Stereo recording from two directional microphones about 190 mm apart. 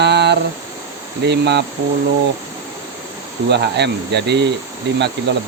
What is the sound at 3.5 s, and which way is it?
Speech, 65° right (ahead or behind).